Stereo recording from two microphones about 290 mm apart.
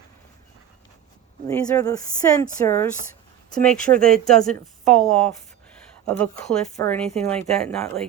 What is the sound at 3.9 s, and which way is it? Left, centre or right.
Speech, right.